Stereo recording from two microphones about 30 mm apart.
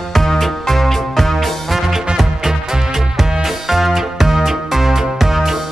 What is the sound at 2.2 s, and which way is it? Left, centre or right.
Music, centre.